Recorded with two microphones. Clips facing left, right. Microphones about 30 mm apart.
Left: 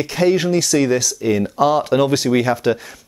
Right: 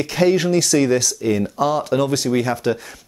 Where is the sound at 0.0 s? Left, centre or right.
Centre.